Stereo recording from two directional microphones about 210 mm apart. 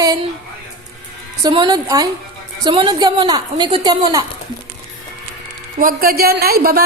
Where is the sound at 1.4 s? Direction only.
20° right (ahead or behind).